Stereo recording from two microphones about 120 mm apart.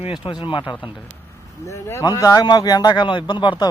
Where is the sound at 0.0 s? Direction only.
45° left (ahead or behind).